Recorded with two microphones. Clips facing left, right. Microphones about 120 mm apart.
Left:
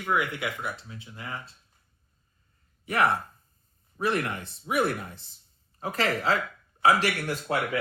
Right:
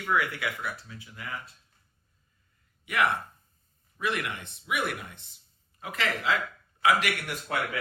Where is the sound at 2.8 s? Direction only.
35° left (ahead or behind).